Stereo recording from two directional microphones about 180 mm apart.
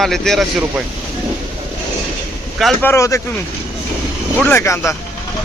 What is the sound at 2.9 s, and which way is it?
Speech, 15° left (ahead or behind).